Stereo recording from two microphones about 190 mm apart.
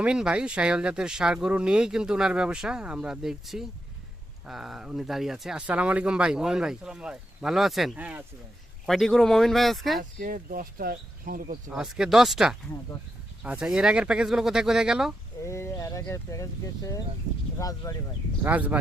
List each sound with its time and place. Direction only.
0.0 s speech: 5° right (ahead or behind)
10.0 s speech: 45° right (ahead or behind)
11.7 s speech: centre (ahead or behind)
15.4 s speech: 15° left (ahead or behind)
18.4 s speech: 10° right (ahead or behind)